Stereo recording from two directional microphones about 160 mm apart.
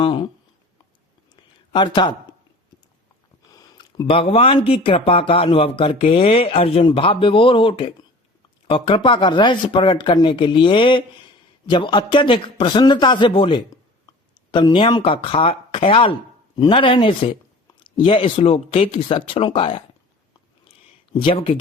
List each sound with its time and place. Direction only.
0.0 s speech: 30° left (ahead or behind)
1.4 s a sound: 30° left (ahead or behind)
3.5 s a man's voice: 25° left (ahead or behind)
21.1 s speech: 35° left (ahead or behind)